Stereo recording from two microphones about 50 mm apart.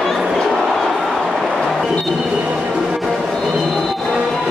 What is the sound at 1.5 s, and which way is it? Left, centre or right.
Music, centre.